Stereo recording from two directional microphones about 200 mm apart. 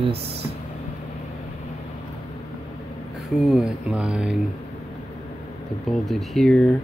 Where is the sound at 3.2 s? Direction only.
Centre (ahead or behind).